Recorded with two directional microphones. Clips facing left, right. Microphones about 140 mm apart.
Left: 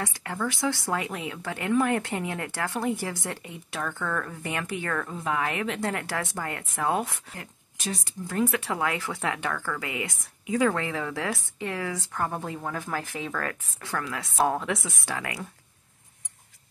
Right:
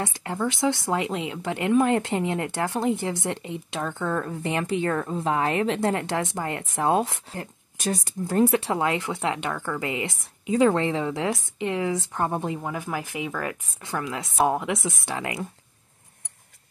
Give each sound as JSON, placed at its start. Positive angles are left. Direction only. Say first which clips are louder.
{"t": 0.0, "sound": "speech", "louder": "right 3 dB", "side_deg": -20}
{"t": 7.8, "sound": "speech", "louder": "right 6 dB", "side_deg": -45}